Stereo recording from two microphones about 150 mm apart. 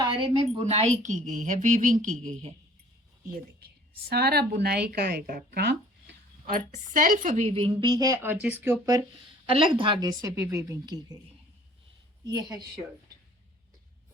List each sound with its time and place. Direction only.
0.0 s a woman's voice: 35° right (ahead or behind); by 2.5 s 55° right (ahead or behind)
4.1 s speech: 90° right
6.4 s a woman's voice: 60° right (ahead or behind); by 7.9 s 40° right (ahead or behind)
7.9 s speech: 25° right (ahead or behind)
9.5 s a woman's voice: 35° right (ahead or behind)
12.2 s a woman's voice: 25° right (ahead or behind)